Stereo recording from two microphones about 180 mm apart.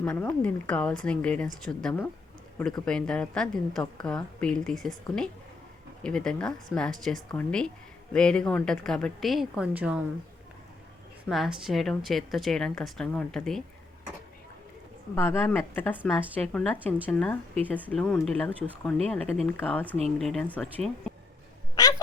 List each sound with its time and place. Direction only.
0.0 s a woman's voice: 10° left (ahead or behind)
6.0 s a woman's voice: 5° left (ahead or behind)
11.3 s a woman's voice: centre (ahead or behind)
15.1 s a woman's voice: 15° left (ahead or behind)
21.8 s cat: 20° left (ahead or behind)